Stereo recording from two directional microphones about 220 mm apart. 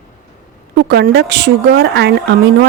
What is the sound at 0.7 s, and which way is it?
Speech, 50° right (ahead or behind).